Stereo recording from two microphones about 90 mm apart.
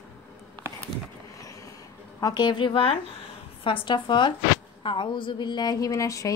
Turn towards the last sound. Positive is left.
turn(degrees=40)  # may be behind; listen again after turning